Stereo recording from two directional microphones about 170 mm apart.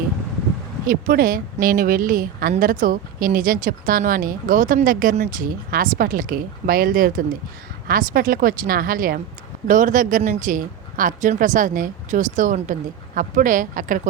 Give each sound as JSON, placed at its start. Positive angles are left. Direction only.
{"t": 0.9, "sound": "a woman's voice", "side_deg": -55}